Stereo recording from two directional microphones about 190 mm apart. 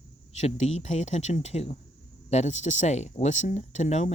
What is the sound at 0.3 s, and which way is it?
Speech, 35° left (ahead or behind).